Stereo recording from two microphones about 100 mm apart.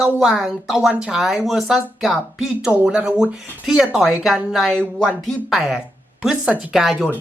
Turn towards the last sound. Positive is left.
turn(degrees=0)  # may be behind; listen again after turning